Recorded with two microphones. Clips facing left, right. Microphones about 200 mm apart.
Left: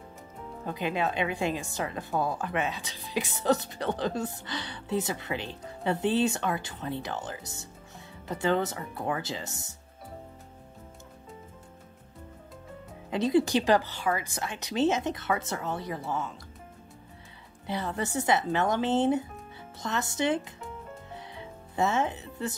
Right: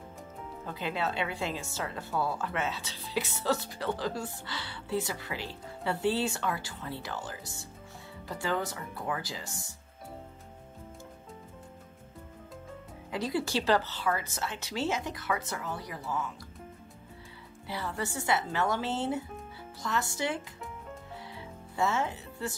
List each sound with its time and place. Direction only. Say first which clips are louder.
0.7 s speech: left 3 dB; 15° left (ahead or behind)
13.1 s speech: left 7 dB; 20° left (ahead or behind)
17.6 s speech: left 4 dB; 20° left (ahead or behind)
21.1 s music: left 1 dB; 20° left (ahead or behind)